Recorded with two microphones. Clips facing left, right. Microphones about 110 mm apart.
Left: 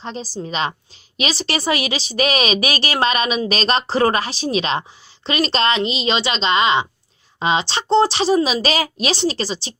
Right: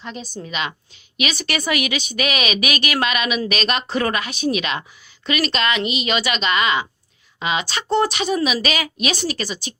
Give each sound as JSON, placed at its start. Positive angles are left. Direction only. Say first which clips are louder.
{"t": 0.0, "sound": "a woman's voice", "louder": "left 4 dB", "side_deg": 30}